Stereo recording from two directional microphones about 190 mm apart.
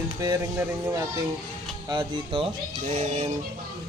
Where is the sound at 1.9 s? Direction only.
25° right (ahead or behind).